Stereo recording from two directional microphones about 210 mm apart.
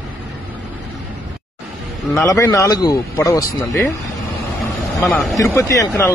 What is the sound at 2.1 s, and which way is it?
A man's voice, 15° left (ahead or behind).